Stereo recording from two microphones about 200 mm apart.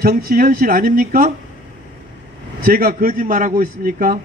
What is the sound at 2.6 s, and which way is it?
A man's voice, 45° right (ahead or behind).